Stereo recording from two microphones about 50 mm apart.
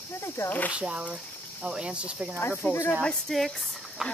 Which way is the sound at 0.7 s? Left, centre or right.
Right.